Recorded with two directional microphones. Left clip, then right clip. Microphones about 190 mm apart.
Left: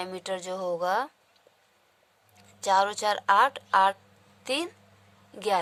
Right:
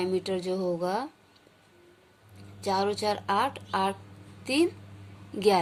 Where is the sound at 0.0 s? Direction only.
35° left (ahead or behind).